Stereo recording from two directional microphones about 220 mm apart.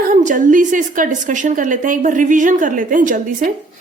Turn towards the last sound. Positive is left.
turn(degrees=-35)  # may be behind; listen again after turning